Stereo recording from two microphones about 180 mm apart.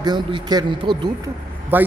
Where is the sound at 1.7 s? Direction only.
10° right (ahead or behind).